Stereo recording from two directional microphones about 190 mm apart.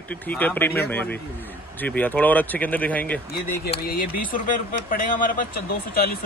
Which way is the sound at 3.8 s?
50° left (ahead or behind).